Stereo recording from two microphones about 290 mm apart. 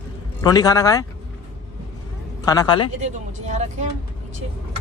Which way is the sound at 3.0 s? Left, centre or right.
Right.